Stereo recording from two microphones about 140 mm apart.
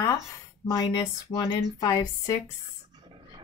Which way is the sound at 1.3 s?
25° left (ahead or behind).